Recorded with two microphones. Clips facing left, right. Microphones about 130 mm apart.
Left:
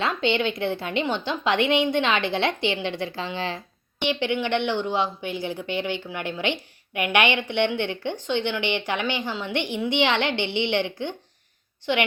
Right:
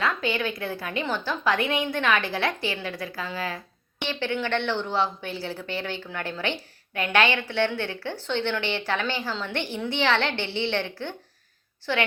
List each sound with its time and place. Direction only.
0.0 s a woman's voice: 25° left (ahead or behind)